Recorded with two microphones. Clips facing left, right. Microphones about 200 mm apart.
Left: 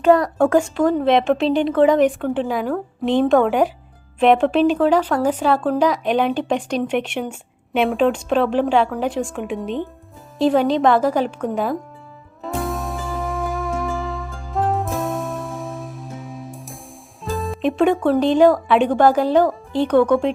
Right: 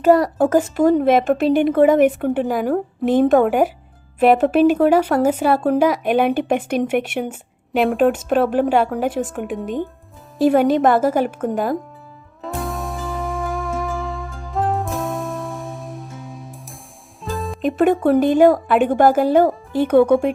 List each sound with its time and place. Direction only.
0.0 s a woman's voice: 5° right (ahead or behind)
12.4 s music: centre (ahead or behind)
18.1 s speech: 50° right (ahead or behind)
18.7 s speech: 5° right (ahead or behind)